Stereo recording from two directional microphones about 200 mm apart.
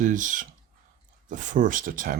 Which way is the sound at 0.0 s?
40° right (ahead or behind).